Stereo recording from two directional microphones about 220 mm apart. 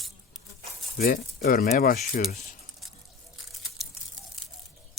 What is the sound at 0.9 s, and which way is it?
Speech, 40° left (ahead or behind).